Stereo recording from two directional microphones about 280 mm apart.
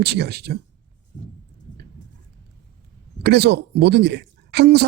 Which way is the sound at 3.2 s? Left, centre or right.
Right.